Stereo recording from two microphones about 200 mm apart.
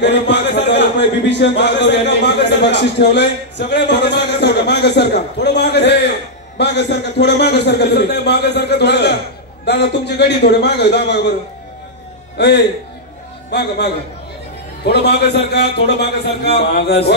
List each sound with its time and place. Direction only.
0.0 s speech: 60° left (ahead or behind)
12.4 s speech: 55° left (ahead or behind)